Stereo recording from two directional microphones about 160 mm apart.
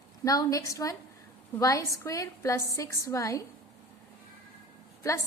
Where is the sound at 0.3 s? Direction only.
20° left (ahead or behind).